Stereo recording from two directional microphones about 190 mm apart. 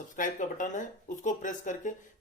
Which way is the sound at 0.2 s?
40° left (ahead or behind).